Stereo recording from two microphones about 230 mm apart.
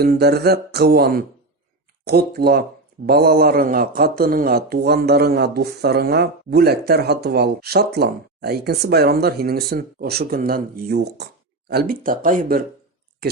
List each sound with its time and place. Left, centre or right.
0.0 s a man's voice: right